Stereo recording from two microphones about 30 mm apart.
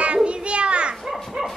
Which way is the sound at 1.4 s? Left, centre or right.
Centre.